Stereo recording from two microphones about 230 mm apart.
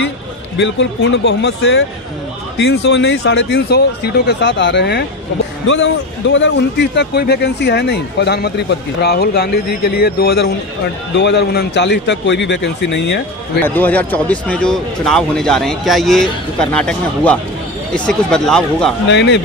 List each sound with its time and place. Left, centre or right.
0.6 s speech: left
13.7 s speech: centre
19.0 s speech: left